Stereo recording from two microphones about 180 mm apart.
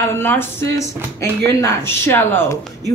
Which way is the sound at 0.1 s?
10° left (ahead or behind).